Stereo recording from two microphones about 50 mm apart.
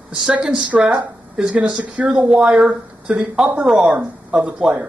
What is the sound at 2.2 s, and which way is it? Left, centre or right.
Speech, centre.